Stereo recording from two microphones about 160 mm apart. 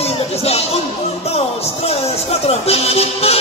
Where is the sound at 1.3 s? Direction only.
40° left (ahead or behind).